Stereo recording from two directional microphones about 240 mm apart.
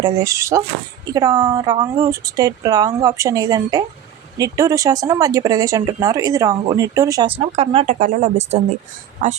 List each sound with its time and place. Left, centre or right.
0.0 s a man's voice: centre; by 9.4 s right